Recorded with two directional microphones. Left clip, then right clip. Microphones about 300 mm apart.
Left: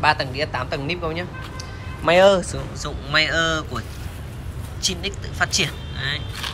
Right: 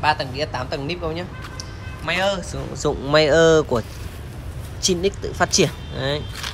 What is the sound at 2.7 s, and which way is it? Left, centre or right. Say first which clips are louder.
Speech: right 4 dB; centre.